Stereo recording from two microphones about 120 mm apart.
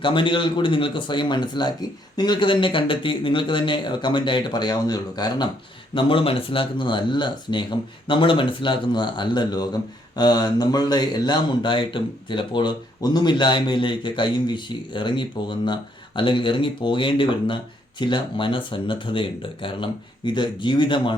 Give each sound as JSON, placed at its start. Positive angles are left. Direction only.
{"t": 0.0, "sound": "speech", "side_deg": 45}
{"t": 5.9, "sound": "speech", "side_deg": 45}